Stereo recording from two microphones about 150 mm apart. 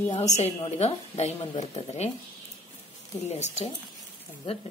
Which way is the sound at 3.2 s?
45° left (ahead or behind).